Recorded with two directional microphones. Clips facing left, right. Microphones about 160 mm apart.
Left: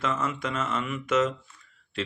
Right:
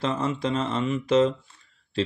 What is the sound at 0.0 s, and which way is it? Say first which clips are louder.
Speech: right 3 dB; 30° right (ahead or behind).